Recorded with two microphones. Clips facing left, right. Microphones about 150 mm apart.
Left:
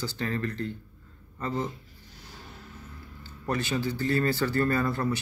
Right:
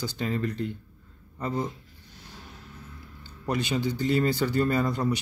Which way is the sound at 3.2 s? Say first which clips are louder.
Right 1 dB; 15° right (ahead or behind).